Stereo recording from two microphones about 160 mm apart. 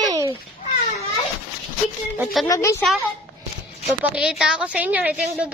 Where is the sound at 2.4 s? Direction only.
20° left (ahead or behind).